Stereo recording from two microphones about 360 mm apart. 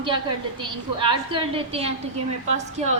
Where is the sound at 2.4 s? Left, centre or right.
Centre.